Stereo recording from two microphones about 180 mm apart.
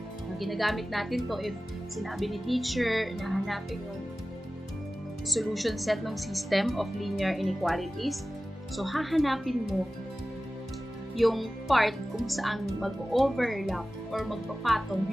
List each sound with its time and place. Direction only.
0.4 s speech: centre (ahead or behind)
5.3 s speech: centre (ahead or behind)
11.1 s speech: centre (ahead or behind)